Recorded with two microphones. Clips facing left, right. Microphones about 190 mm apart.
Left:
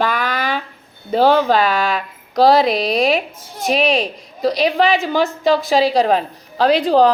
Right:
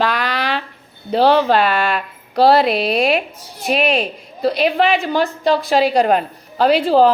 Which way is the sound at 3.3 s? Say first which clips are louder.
Left 4 dB; 50° left (ahead or behind).